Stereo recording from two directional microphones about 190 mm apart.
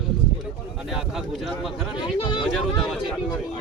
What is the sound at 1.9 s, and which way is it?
Speech, 25° left (ahead or behind).